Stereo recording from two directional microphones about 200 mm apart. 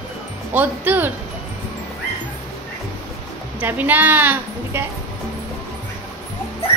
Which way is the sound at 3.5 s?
10° right (ahead or behind).